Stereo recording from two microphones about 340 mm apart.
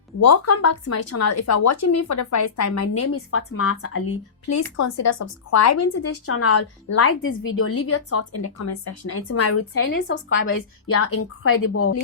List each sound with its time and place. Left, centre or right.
0.2 s speech: left
4.5 s a woman's voice: left